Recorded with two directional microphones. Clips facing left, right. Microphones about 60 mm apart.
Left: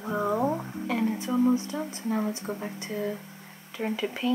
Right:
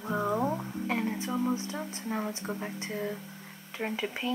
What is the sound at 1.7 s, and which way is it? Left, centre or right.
Speech, centre.